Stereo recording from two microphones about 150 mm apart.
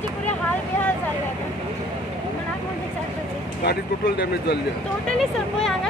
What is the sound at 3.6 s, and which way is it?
Speech, 90° left.